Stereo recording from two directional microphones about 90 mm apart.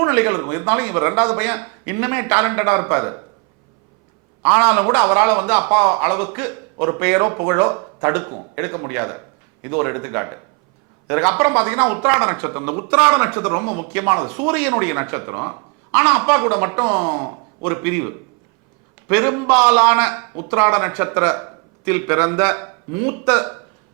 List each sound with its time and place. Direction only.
0.0 s a man's voice: 15° right (ahead or behind)
4.4 s a man's voice: 15° right (ahead or behind)
20.2 s a sound: 30° right (ahead or behind)
20.5 s a man's voice: 15° right (ahead or behind)